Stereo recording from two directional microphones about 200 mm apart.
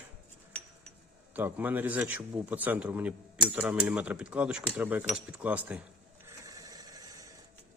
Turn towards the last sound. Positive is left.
turn(degrees=-20)  # may be behind; listen again after turning